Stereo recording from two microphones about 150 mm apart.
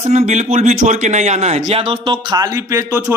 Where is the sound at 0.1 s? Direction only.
50° right (ahead or behind).